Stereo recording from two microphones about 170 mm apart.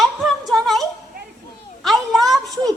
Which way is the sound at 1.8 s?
Centre (ahead or behind).